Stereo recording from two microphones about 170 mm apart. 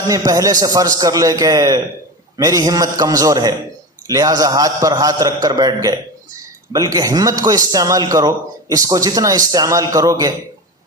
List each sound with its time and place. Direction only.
0.3 s a man's voice: 20° right (ahead or behind)